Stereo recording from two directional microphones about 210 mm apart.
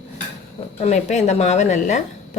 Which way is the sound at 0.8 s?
35° left (ahead or behind).